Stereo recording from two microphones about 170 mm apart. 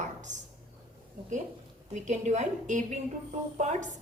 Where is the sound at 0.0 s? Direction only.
45° right (ahead or behind).